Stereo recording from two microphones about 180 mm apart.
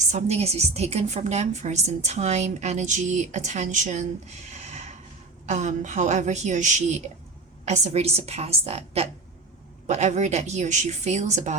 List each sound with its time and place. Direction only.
0.1 s a woman's voice: 40° right (ahead or behind)